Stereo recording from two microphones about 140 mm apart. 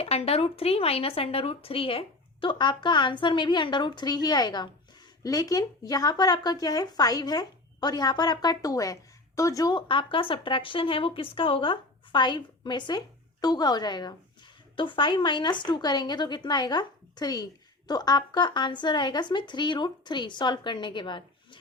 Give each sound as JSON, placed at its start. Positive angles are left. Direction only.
{"t": 0.0, "sound": "a woman's voice", "side_deg": 45}